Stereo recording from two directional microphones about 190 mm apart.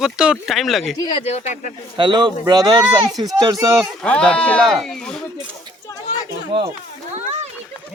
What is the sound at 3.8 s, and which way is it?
Speech, 5° left (ahead or behind).